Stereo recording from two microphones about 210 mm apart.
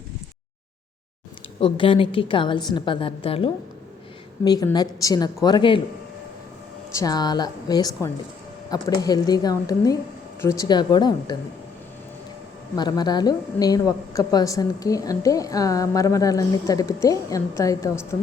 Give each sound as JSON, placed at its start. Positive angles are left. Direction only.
{"t": 1.5, "sound": "a woman's voice", "side_deg": 25}
{"t": 6.9, "sound": "a woman's voice", "side_deg": 20}
{"t": 12.7, "sound": "a woman's voice", "side_deg": 20}